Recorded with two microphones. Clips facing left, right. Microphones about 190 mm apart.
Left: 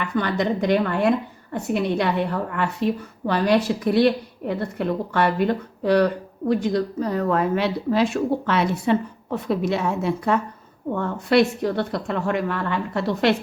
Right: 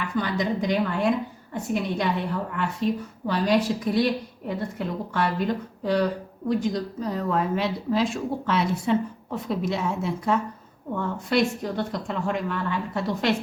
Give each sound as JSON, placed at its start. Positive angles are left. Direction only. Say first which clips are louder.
{"t": 0.2, "sound": "a woman's voice", "louder": "left 3 dB", "side_deg": 65}